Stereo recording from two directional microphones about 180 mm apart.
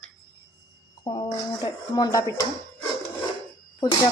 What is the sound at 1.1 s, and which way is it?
Speech, 25° left (ahead or behind).